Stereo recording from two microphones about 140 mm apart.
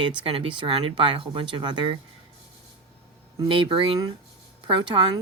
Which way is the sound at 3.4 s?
40° right (ahead or behind).